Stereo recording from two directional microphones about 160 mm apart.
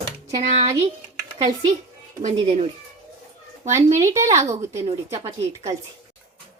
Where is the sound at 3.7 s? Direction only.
20° right (ahead or behind).